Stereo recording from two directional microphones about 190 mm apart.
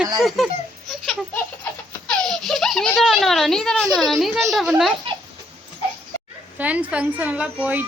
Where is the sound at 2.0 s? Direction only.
5° left (ahead or behind).